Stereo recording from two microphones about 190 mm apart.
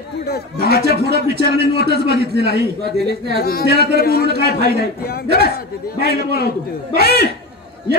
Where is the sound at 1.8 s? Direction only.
60° right (ahead or behind).